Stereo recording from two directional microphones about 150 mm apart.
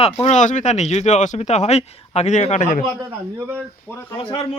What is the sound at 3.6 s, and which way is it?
Speech, 10° left (ahead or behind).